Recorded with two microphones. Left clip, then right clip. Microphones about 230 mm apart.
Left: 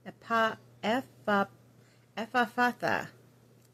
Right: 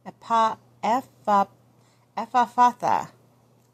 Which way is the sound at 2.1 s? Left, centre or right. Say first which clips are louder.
Right 8 dB; centre.